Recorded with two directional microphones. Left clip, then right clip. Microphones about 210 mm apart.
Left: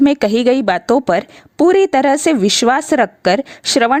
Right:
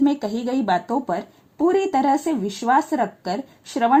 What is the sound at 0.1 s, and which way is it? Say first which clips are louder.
Speech: left 11 dB; 65° left (ahead or behind).